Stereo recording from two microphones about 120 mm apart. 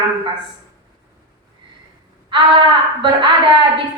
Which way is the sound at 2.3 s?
40° right (ahead or behind).